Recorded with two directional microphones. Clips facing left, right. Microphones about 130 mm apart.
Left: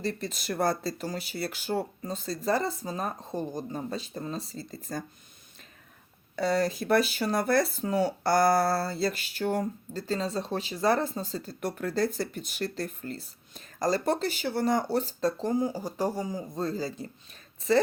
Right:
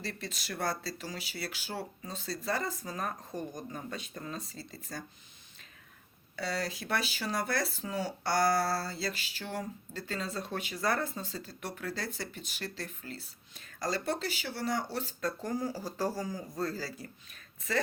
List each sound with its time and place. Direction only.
0.0 s speech: 40° left (ahead or behind)
6.3 s speech: 45° left (ahead or behind)
10.1 s speech: 30° left (ahead or behind)
11.2 s speech: 40° left (ahead or behind); by 17.1 s 20° left (ahead or behind)